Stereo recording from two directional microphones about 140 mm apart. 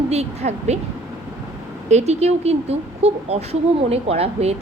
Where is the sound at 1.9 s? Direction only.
50° right (ahead or behind).